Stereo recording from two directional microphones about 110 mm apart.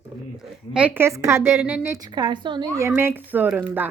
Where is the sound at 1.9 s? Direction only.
40° right (ahead or behind).